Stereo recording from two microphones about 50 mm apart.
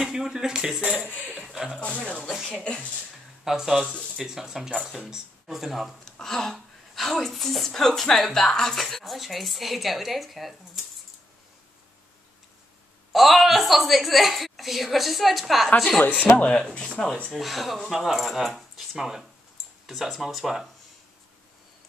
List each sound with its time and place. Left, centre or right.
0.0 s speech: centre
2.0 s speech: left
2.2 s a woman's voice: centre
2.6 s speech: left
3.4 s a woman's voice: centre
6.0 s a woman's voice: centre
13.1 s a woman's voice: centre
16.3 s speech: left
17.3 s a woman's voice: centre